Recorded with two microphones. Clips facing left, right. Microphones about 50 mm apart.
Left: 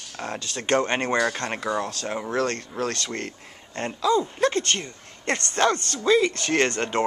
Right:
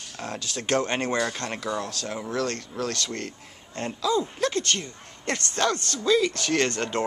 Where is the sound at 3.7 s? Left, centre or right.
Centre.